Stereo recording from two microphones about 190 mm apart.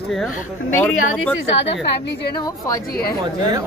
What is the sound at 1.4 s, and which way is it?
Speech, 65° left (ahead or behind).